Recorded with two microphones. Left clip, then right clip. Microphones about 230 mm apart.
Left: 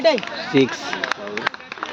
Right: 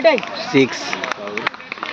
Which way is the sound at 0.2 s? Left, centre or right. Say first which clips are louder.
Right 3 dB; left.